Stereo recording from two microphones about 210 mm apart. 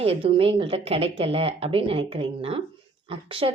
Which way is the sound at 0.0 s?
25° right (ahead or behind).